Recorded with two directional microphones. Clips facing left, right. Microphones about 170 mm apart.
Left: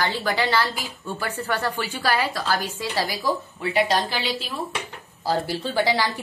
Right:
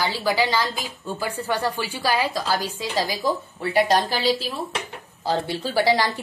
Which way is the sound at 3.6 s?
40° right (ahead or behind).